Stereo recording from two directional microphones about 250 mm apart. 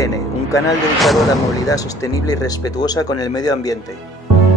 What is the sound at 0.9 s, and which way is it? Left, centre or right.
Speech, centre.